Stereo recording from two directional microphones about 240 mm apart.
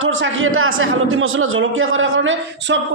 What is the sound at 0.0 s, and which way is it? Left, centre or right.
A man's voice, right.